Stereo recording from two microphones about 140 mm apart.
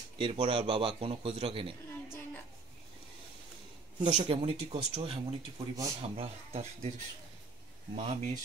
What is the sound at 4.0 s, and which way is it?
A man's voice, 40° right (ahead or behind).